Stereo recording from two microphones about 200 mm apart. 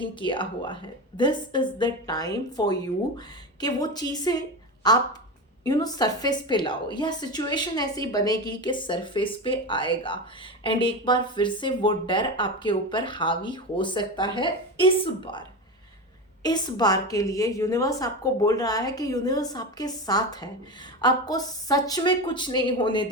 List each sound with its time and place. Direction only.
0.0 s a woman's voice: 25° left (ahead or behind)